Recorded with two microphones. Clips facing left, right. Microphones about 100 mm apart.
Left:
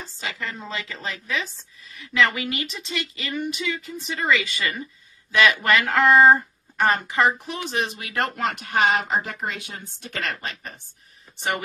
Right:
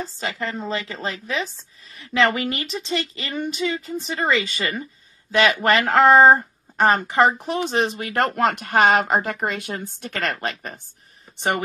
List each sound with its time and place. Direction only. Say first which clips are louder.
0.0 s speech: right 5 dB; 35° right (ahead or behind); by 10.8 s 55° right (ahead or behind)